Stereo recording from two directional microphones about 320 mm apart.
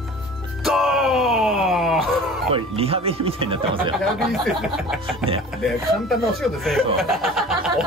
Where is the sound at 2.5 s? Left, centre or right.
Centre.